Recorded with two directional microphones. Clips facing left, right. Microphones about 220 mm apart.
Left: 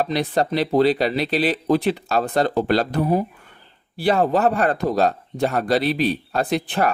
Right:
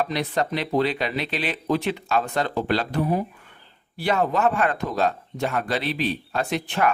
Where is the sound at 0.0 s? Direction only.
35° left (ahead or behind).